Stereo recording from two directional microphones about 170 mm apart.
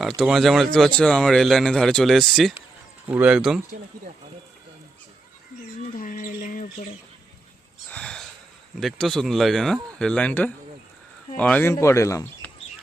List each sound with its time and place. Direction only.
0.2 s speech: centre (ahead or behind)
6.0 s speech: 55° left (ahead or behind)
7.9 s speech: 5° left (ahead or behind)